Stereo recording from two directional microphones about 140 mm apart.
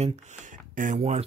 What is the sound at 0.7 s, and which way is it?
Speech, 65° right (ahead or behind).